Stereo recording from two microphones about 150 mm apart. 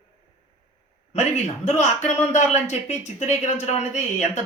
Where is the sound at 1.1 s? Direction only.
50° left (ahead or behind).